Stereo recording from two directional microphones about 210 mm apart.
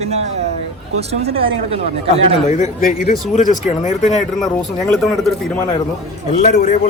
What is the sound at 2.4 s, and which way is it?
Speech, 35° left (ahead or behind).